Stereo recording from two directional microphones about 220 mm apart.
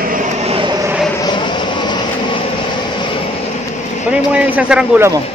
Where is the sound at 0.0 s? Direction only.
35° right (ahead or behind); by 0.9 s 15° right (ahead or behind).